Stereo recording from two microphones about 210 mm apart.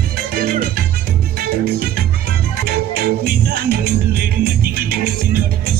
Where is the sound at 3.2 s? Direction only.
45° right (ahead or behind).